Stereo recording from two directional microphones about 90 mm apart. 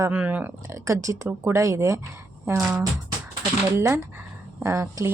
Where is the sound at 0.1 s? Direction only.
15° right (ahead or behind).